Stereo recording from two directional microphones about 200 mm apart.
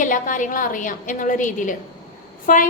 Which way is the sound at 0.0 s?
40° left (ahead or behind).